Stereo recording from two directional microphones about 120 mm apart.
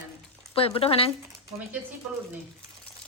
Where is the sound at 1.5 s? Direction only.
15° right (ahead or behind).